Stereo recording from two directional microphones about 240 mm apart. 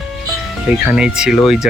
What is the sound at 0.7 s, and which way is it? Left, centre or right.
Speech, centre.